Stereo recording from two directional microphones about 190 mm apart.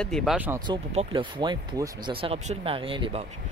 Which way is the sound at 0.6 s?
30° right (ahead or behind).